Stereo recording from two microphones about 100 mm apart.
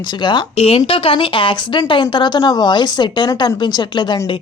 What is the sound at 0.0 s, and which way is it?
Speech, 50° left (ahead or behind).